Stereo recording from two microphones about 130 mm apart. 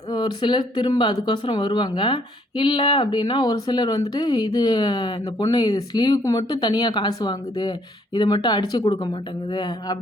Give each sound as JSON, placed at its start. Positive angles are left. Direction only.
{"t": 0.1, "sound": "speech", "side_deg": 35}